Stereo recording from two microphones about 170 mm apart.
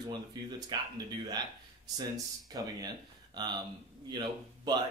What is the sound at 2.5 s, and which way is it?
A man's voice, 20° right (ahead or behind).